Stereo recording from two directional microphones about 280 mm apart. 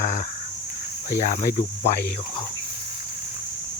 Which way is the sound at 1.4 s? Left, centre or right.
Left.